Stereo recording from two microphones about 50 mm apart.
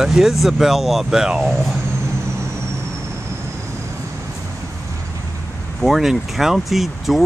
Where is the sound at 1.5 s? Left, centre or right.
Centre.